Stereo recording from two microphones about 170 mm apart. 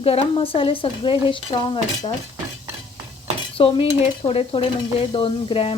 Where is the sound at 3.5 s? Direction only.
35° left (ahead or behind).